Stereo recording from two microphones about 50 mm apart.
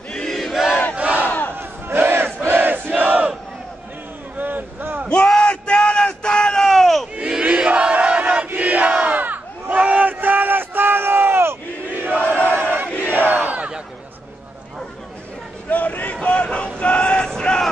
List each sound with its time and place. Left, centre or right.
0.1 s battle cry: centre
0.4 s battle cry: centre
0.9 s crowd: right
1.5 s battle cry: right
2.4 s crowd: right
2.9 s crowd: right
4.4 s a sound: right
5.0 s a sound: left; by 7.1 s centre
7.2 s crowd: right
12.5 s battle cry: right
15.7 s a sound: left; by 17.6 s centre